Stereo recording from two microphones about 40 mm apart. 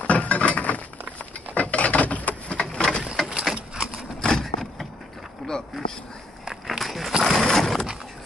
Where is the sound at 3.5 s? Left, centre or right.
Centre.